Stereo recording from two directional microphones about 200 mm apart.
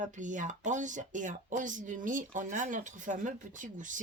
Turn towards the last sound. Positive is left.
turn(degrees=-40)  # may be behind; listen again after turning